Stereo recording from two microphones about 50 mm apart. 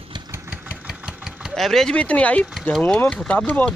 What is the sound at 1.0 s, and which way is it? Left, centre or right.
Engine, centre.